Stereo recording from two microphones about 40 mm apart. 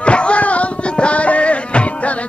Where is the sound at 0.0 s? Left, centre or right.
Left.